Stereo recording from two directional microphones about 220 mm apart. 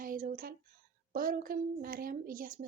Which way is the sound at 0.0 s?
40° right (ahead or behind).